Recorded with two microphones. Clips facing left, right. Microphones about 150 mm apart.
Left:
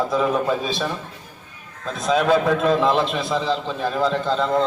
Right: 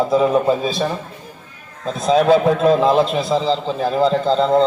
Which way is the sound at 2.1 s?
30° right (ahead or behind).